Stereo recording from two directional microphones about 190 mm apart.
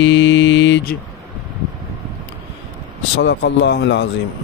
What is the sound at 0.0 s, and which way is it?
Mantra, 75° left (ahead or behind).